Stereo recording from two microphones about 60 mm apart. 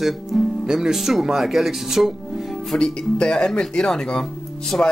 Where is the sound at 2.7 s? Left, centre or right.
Centre.